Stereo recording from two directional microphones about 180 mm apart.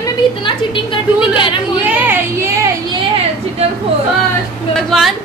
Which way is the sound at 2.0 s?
15° right (ahead or behind).